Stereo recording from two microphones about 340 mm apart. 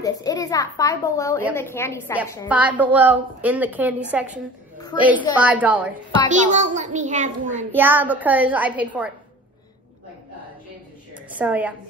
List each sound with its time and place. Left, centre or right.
0.0 s a child's voice: centre
2.4 s a woman's voice: centre
6.4 s a child's voice: right
7.7 s a woman's voice: centre
11.2 s a woman's voice: centre